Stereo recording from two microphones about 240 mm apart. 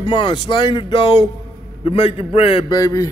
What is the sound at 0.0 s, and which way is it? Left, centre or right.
A man's voice, centre.